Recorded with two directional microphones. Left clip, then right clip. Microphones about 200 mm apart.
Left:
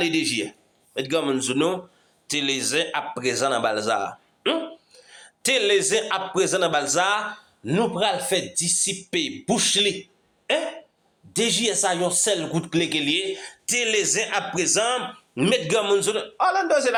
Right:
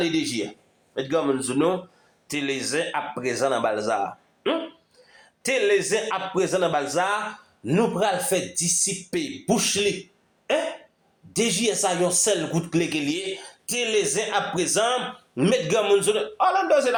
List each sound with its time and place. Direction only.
0.0 s a man's voice: 20° left (ahead or behind)
1.1 s a man's voice: 35° left (ahead or behind)
7.6 s speech: 15° left (ahead or behind)
11.3 s a man's voice: 15° left (ahead or behind)